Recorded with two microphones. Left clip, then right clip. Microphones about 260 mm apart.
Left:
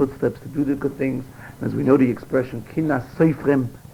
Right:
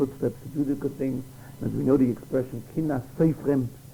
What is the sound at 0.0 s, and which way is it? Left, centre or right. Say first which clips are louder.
Speech: left 6 dB; right.